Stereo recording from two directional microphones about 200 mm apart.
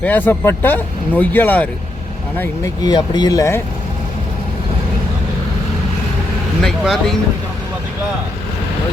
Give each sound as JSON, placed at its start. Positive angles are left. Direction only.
{"t": 0.0, "sound": "speech", "side_deg": 10}
{"t": 2.4, "sound": "speech", "side_deg": 20}
{"t": 6.6, "sound": "speech", "side_deg": 0}